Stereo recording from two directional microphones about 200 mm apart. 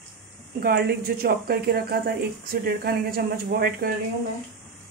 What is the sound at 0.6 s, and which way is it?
Speech, 50° right (ahead or behind).